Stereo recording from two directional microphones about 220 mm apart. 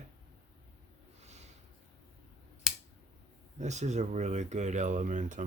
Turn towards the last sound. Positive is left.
turn(degrees=-35)  # may be behind; listen again after turning